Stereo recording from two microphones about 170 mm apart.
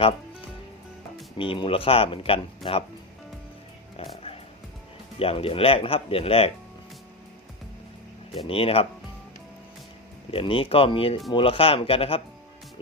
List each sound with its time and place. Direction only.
1.4 s speech: 30° left (ahead or behind)
3.9 s a sound: 35° left (ahead or behind)
5.2 s speech: 35° left (ahead or behind)
8.4 s speech: 35° left (ahead or behind)
10.3 s speech: 30° left (ahead or behind)